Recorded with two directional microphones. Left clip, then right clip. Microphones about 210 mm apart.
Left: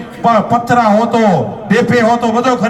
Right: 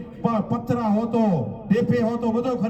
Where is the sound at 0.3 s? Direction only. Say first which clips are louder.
Left 15 dB; 10° left (ahead or behind).